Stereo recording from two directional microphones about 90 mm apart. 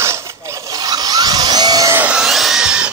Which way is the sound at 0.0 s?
30° right (ahead or behind).